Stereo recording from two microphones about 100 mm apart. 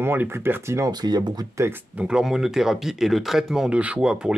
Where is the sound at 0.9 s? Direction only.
45° right (ahead or behind).